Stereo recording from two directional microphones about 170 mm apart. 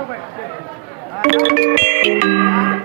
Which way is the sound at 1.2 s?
55° right (ahead or behind).